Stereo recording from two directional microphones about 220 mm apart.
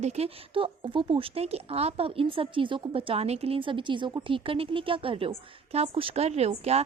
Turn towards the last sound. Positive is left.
turn(degrees=-30)  # may be behind; listen again after turning